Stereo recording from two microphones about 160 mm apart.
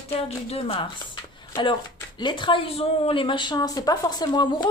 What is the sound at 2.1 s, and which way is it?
A woman's voice, 30° left (ahead or behind).